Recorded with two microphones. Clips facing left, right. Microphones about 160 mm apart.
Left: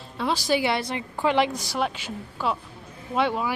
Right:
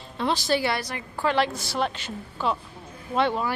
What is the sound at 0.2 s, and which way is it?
A woman's voice, 10° left (ahead or behind).